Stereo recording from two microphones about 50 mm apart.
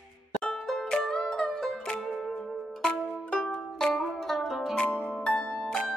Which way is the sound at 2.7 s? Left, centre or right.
Centre.